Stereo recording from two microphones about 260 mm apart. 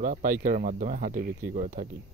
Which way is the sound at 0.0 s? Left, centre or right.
Right.